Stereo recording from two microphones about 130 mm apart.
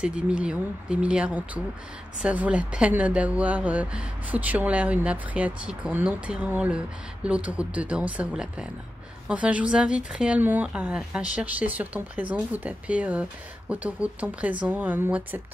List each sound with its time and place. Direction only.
0.0 s a woman's voice: 10° right (ahead or behind)